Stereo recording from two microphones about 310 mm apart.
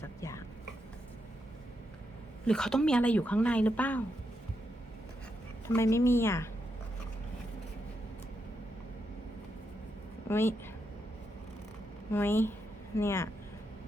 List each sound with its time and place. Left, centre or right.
0.2 s chopping: centre
2.5 s speech: centre
5.6 s a woman's voice: centre
10.2 s speech: centre
12.1 s a woman's voice: centre